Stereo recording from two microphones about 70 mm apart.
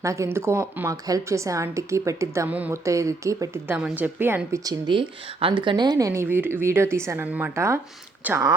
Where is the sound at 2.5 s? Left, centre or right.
Right.